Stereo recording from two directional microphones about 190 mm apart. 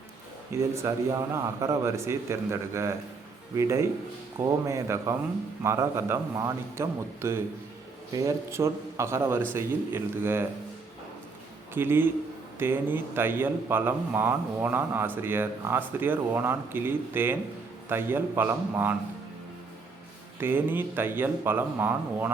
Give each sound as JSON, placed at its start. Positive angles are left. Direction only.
{"t": 0.5, "sound": "a man's voice", "side_deg": -15}
{"t": 11.7, "sound": "a man's voice", "side_deg": -10}
{"t": 20.4, "sound": "a man's voice", "side_deg": -10}